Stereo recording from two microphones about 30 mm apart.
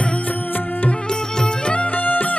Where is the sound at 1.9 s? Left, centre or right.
Left.